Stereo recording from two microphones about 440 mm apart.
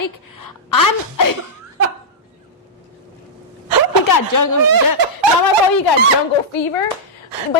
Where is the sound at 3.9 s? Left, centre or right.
Left.